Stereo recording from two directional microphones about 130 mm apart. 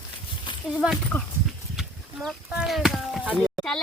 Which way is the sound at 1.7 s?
5° right (ahead or behind).